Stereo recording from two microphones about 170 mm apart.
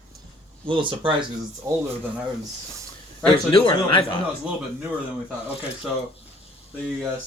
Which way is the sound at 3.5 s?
30° left (ahead or behind).